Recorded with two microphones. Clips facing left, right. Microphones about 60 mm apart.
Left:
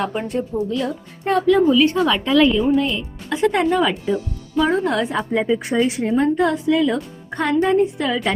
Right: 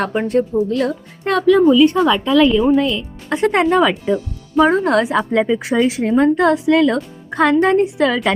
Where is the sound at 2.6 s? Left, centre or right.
Right.